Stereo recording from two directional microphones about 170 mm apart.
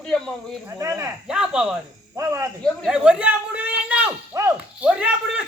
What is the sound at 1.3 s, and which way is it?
Speech, 5° right (ahead or behind).